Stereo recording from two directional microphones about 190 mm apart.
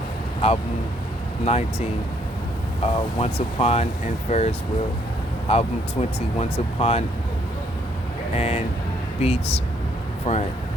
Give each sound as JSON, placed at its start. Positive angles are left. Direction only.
{"t": 0.4, "sound": "speech", "side_deg": 30}
{"t": 8.4, "sound": "speech", "side_deg": 35}